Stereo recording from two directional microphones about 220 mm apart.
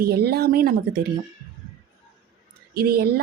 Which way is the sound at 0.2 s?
45° right (ahead or behind).